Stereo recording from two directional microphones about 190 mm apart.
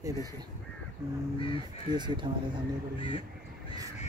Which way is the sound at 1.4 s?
25° left (ahead or behind).